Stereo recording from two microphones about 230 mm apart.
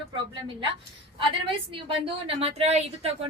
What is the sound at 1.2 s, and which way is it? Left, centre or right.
A woman's voice, right.